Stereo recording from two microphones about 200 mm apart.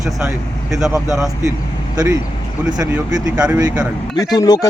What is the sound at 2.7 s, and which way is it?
Speech, 5° right (ahead or behind).